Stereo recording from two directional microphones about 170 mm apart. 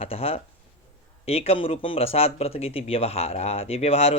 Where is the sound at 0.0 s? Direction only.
35° left (ahead or behind).